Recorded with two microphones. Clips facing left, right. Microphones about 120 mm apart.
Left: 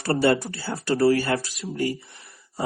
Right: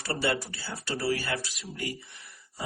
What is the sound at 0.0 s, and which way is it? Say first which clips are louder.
Speech: left 9 dB; 45° left (ahead or behind).